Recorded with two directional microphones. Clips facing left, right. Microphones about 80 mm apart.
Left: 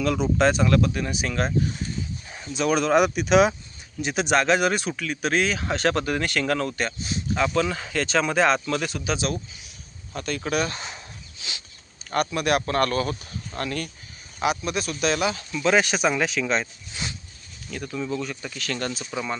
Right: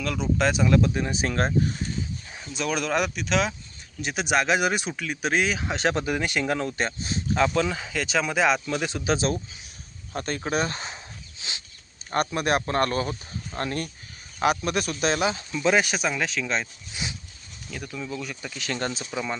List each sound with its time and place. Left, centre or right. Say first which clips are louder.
0.0 s speech: left 4 dB; centre
0.7 s speech: even; right
2.3 s speech: left 5 dB; centre
4.0 s speech: left 3 dB; centre
6.8 s speech: even; right
7.7 s speech: left 2 dB; centre; by 10.9 s right
11.3 s a sound: even; right
12.1 s speech: left 1 dB; right
14.4 s speech: right 1 dB; right
15.7 s speech: left 4 dB; centre
17.9 s speech: left 6 dB; centre
18.2 s speech: left 3 dB; centre
18.6 s speech: even; centre